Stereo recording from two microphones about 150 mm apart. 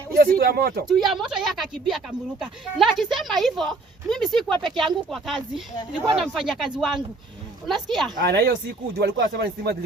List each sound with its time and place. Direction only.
0.1 s speech: 90° right
0.9 s speech: centre (ahead or behind)
8.2 s speech: 90° right